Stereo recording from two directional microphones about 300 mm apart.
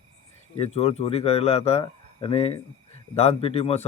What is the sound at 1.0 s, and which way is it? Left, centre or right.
Speech, centre.